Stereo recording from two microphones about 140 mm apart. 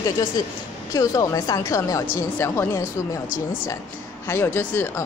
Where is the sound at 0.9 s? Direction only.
25° left (ahead or behind).